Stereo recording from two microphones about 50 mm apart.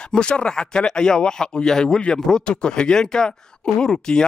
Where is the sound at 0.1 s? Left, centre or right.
Centre.